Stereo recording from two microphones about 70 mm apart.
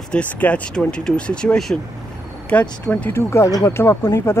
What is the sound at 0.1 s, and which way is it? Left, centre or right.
Speech, centre.